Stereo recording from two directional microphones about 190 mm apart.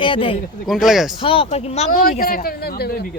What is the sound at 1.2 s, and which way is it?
Speech, 30° left (ahead or behind).